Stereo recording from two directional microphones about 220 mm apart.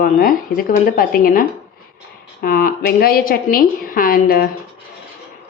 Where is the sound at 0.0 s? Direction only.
40° left (ahead or behind).